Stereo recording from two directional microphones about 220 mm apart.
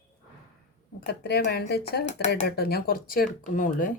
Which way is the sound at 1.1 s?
45° left (ahead or behind).